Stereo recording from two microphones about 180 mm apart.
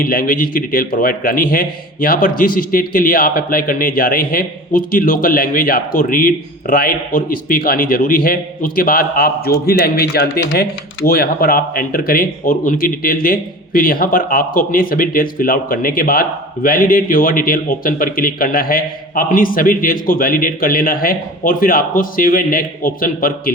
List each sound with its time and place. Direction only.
0.0 s speech: 50° left (ahead or behind)